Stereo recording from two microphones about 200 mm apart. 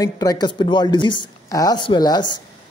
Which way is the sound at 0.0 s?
20° left (ahead or behind).